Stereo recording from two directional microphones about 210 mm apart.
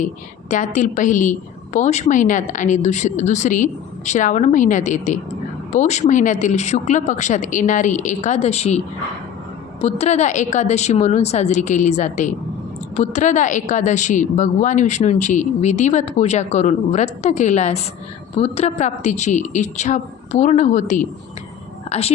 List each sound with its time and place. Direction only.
0.5 s a woman's voice: 35° left (ahead or behind)
9.8 s a woman's voice: 30° left (ahead or behind)